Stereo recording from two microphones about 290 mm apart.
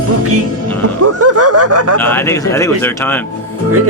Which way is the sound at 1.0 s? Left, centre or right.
Right.